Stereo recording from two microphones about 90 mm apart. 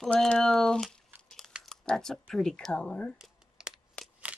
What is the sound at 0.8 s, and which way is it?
Crumpling, 5° left (ahead or behind).